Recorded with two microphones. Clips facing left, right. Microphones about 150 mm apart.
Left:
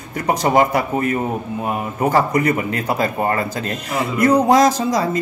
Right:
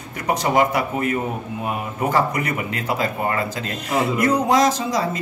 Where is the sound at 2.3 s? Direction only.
40° left (ahead or behind).